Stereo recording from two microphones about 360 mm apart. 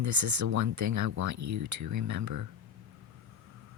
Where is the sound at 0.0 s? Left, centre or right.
Right.